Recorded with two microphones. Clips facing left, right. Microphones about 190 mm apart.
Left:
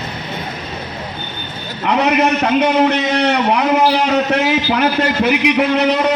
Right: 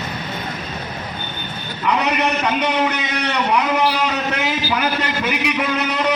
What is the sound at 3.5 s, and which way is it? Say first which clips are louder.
A man's voice: left 1 dB; 60° left (ahead or behind).